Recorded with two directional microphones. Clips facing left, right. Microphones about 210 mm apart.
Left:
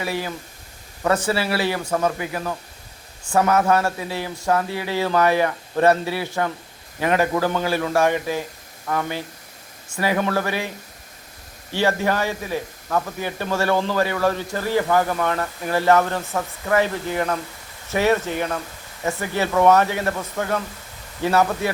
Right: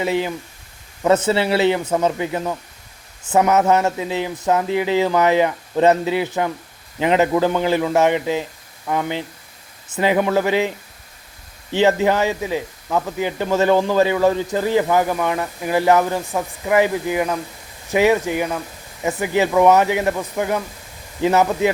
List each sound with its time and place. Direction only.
0.0 s speech: 20° right (ahead or behind)
11.7 s speech: 20° right (ahead or behind)